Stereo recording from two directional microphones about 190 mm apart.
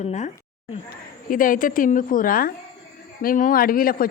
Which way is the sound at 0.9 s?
45° left (ahead or behind).